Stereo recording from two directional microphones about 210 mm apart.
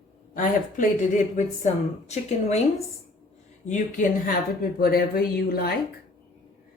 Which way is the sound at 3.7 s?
35° left (ahead or behind).